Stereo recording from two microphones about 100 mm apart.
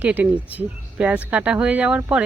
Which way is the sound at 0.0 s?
15° right (ahead or behind).